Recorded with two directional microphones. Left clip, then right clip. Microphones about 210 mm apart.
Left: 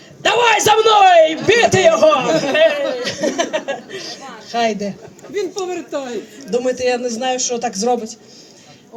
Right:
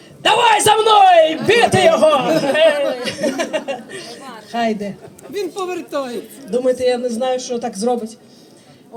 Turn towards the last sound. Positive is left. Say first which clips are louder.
# left 2 dB
turn(degrees=35)  # may be behind; listen again after turning